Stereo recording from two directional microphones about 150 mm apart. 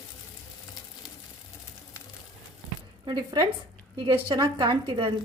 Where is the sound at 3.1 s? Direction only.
35° right (ahead or behind).